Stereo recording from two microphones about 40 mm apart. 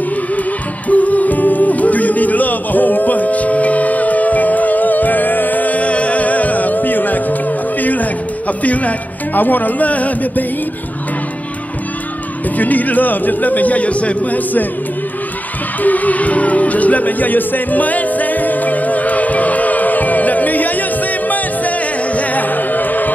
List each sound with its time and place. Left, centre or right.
0.8 s music: left
12.5 s a man's voice: left
15.8 s music: left